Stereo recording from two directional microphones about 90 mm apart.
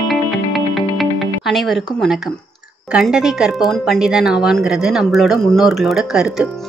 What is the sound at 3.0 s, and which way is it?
A woman's voice, 5° right (ahead or behind).